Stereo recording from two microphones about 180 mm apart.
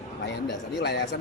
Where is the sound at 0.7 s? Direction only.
75° left (ahead or behind).